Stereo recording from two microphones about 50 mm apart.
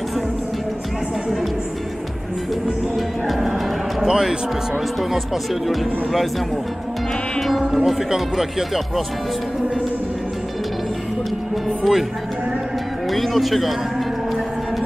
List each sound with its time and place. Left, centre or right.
3.3 s music: centre
4.1 s speech: centre
7.3 s music: centre
7.6 s speech: centre
11.8 s speech: centre
13.1 s speech: centre